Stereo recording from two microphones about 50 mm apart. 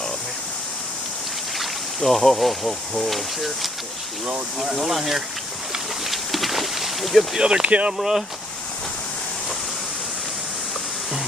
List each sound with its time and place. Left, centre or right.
1.6 s speech: centre
6.0 s a sound: centre
7.3 s speech: centre